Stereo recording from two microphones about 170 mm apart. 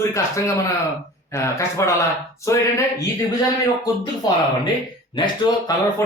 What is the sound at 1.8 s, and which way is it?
Speech, 15° left (ahead or behind).